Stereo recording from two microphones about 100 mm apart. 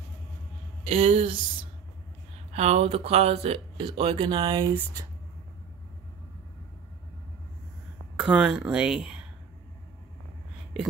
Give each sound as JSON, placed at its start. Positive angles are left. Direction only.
{"t": 0.8, "sound": "speech", "side_deg": -85}
{"t": 2.5, "sound": "speech", "side_deg": -90}
{"t": 8.2, "sound": "speech", "side_deg": -5}